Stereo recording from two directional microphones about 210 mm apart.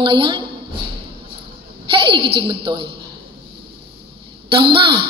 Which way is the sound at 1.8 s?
25° right (ahead or behind).